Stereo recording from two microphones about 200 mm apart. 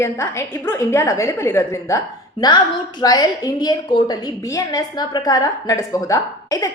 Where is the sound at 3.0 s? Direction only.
20° left (ahead or behind).